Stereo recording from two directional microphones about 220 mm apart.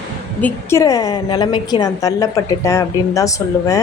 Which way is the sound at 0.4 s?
10° left (ahead or behind).